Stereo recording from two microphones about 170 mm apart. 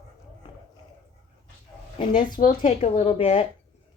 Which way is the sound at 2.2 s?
55° left (ahead or behind).